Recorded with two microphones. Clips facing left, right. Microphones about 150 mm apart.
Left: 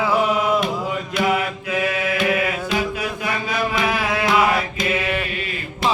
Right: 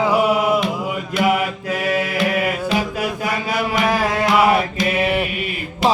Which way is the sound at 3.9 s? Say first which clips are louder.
Right 3 dB; 40° right (ahead or behind).